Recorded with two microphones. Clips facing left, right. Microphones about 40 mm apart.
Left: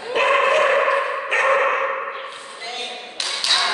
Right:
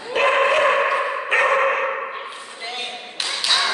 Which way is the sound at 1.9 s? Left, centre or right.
Centre.